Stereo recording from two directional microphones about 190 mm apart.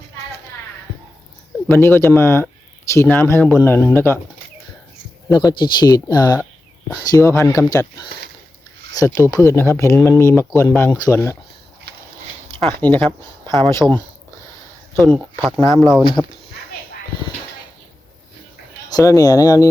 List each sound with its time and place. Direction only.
1.6 s speech: 10° left (ahead or behind)
5.3 s speech: 20° left (ahead or behind)
12.5 s speech: 10° left (ahead or behind)
13.7 s speech: 25° right (ahead or behind)
14.9 s speech: 5° left (ahead or behind)
15.2 s speech: 5° right (ahead or behind)
15.6 s speech: 15° left (ahead or behind)
18.9 s speech: 20° left (ahead or behind)